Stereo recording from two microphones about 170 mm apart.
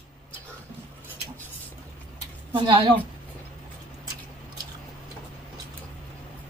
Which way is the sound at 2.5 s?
30° right (ahead or behind).